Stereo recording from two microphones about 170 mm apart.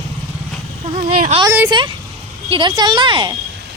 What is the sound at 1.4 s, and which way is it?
Speech, 10° right (ahead or behind).